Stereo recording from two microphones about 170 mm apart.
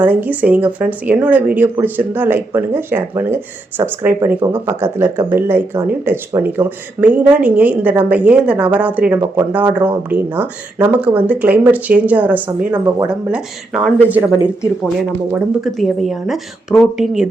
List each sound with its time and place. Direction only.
0.0 s speech: 10° right (ahead or behind)